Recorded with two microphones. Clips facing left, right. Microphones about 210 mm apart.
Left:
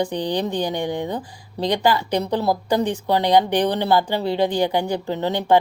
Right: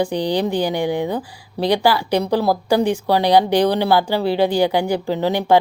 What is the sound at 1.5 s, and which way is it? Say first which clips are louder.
Speech: right 3 dB; 90° right.